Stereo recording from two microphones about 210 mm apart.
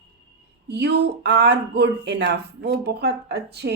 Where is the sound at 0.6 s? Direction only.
55° right (ahead or behind).